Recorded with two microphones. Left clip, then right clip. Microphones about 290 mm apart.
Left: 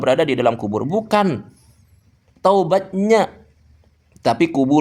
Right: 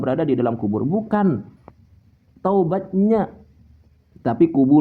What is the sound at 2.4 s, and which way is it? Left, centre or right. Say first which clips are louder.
A man's voice: left 5 dB; left.